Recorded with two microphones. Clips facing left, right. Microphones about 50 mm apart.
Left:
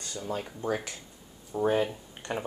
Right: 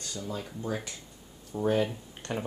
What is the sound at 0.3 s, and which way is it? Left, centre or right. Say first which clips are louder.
Speech: left 4 dB; left.